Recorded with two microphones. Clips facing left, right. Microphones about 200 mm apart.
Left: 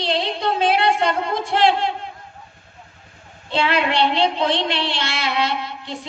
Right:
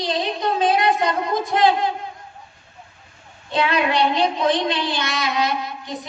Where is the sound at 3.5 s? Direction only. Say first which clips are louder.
Even; 30° left (ahead or behind).